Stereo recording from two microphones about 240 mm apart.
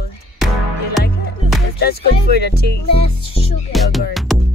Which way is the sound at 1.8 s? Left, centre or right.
Left.